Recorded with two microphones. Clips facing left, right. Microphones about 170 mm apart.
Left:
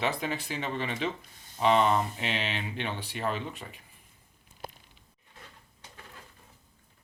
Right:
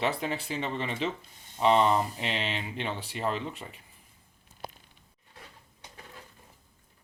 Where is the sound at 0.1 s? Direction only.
30° right (ahead or behind).